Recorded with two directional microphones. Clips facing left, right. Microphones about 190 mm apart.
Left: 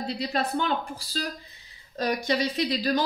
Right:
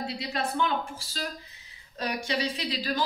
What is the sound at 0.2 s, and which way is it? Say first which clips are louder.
A woman's voice: left 2 dB; 35° left (ahead or behind).